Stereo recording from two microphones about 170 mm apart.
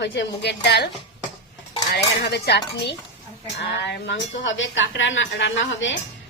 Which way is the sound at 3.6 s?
80° left.